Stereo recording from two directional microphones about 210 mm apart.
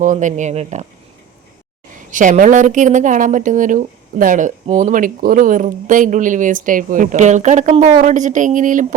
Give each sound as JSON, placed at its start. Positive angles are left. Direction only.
{"t": 0.0, "sound": "a woman's voice", "side_deg": -35}
{"t": 2.0, "sound": "a woman's voice", "side_deg": -40}